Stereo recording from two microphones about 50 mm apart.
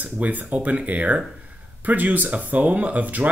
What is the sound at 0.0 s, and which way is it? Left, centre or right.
Speech, right.